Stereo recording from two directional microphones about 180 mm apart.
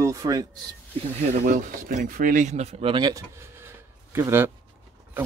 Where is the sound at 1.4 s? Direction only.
45° right (ahead or behind).